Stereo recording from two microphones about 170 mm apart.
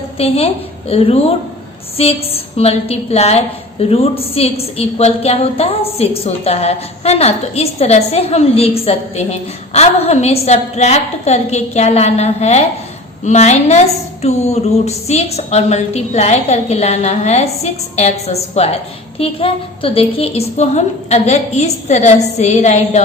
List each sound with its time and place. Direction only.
0.2 s a woman's voice: 35° left (ahead or behind)